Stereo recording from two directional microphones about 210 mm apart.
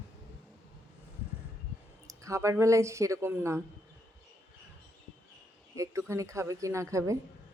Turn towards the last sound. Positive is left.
turn(degrees=-15)  # may be behind; listen again after turning